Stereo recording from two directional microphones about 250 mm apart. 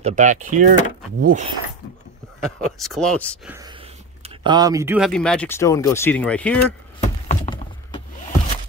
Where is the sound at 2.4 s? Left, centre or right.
Centre.